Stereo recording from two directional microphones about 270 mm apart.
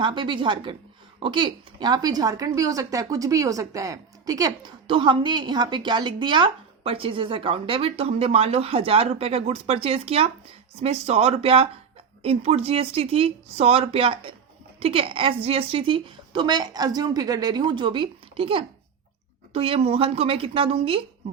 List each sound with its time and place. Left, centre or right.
0.0 s a woman's voice: centre